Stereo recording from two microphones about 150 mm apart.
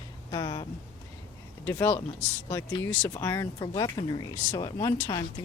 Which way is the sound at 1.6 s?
15° left (ahead or behind).